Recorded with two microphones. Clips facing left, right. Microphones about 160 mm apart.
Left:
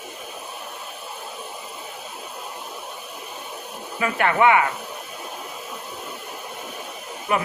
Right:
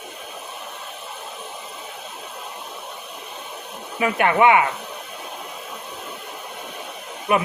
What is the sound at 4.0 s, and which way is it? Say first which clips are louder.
Speech: right 2 dB; 20° right (ahead or behind).